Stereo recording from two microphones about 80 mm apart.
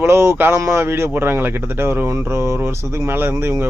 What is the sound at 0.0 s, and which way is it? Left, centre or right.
Speech, right.